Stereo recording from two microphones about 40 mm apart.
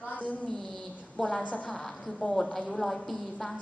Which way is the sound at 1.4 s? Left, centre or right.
Left.